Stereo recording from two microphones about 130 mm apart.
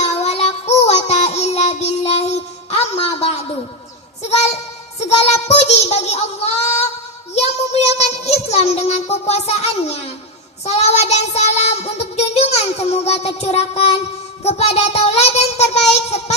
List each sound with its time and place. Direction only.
0.0 s child singing: 55° left (ahead or behind)